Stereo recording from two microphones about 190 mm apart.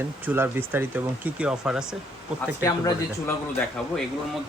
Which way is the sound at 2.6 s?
15° left (ahead or behind).